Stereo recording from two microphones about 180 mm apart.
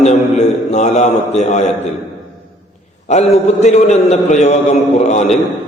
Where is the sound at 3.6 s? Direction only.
40° left (ahead or behind).